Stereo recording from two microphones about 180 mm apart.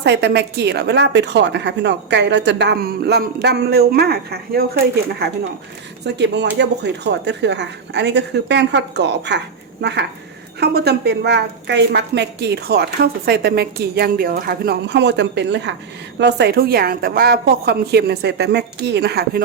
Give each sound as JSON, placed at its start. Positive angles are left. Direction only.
{"t": 0.0, "sound": "a woman's voice", "side_deg": -75}
{"t": 6.1, "sound": "a woman's voice", "side_deg": -70}